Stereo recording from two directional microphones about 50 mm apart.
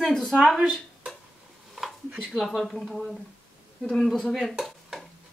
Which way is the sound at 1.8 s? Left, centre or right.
Centre.